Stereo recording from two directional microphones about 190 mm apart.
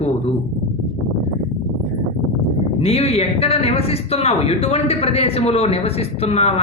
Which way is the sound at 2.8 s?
30° left (ahead or behind).